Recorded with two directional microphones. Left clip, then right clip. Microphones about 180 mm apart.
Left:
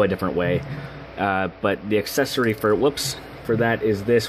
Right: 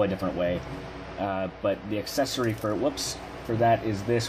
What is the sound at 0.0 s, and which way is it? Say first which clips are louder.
Speech: left 5 dB; 55° left (ahead or behind).